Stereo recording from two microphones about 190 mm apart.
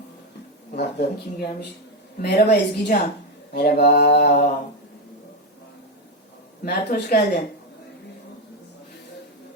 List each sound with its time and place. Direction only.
0.7 s mantra: 55° left (ahead or behind)
6.7 s mantra: 60° left (ahead or behind)